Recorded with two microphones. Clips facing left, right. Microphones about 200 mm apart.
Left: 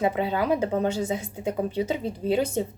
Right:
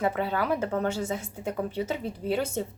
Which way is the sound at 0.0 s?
15° left (ahead or behind).